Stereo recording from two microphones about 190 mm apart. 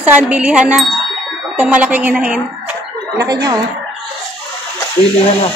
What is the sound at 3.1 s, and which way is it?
Speech, 20° right (ahead or behind).